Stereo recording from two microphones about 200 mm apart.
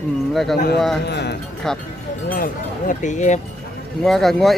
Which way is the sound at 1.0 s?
55° left (ahead or behind).